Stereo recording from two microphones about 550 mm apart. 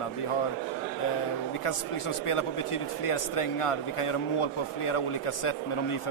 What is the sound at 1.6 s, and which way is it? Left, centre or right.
Speech, left.